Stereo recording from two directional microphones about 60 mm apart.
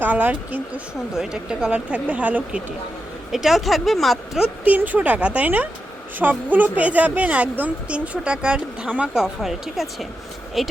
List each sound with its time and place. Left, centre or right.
0.0 s speech: right
1.1 s speech: centre
3.3 s speech: centre
4.6 s speech: right; by 10.7 s centre